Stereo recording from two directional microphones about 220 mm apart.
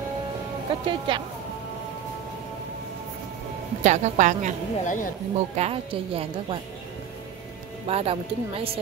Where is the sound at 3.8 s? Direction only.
35° right (ahead or behind).